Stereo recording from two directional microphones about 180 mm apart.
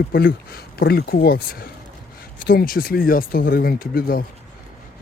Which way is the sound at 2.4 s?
55° left (ahead or behind).